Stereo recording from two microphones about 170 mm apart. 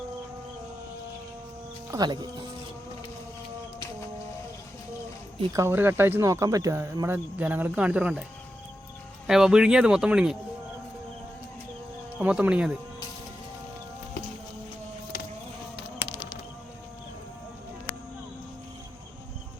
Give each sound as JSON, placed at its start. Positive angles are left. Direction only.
{"t": 1.9, "sound": "speech", "side_deg": -25}
{"t": 5.5, "sound": "speech", "side_deg": -15}
{"t": 9.2, "sound": "speech", "side_deg": -5}
{"t": 12.2, "sound": "speech", "side_deg": -10}
{"t": 16.0, "sound": "music", "side_deg": 25}